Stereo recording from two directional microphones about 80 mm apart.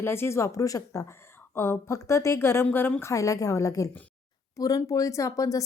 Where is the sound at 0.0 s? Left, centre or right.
Left.